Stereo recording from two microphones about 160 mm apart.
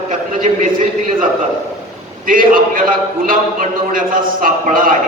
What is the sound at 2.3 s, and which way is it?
A man's voice, 60° right (ahead or behind).